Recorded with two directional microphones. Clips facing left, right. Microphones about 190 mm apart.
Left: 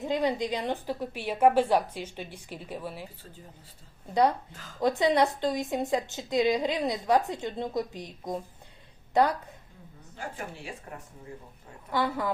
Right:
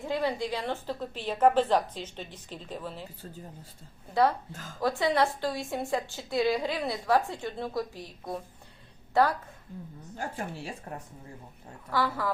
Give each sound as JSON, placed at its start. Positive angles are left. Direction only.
{"t": 0.0, "sound": "a woman's voice", "side_deg": 20}
{"t": 4.1, "sound": "a woman's voice", "side_deg": 20}
{"t": 10.2, "sound": "speech", "side_deg": -40}
{"t": 11.9, "sound": "a woman's voice", "side_deg": 20}